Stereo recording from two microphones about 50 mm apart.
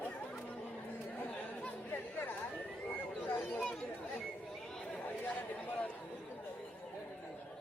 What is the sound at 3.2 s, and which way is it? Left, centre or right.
Chatter, left.